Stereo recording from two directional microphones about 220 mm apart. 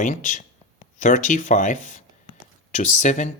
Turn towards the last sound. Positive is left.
turn(degrees=35)  # may be behind; listen again after turning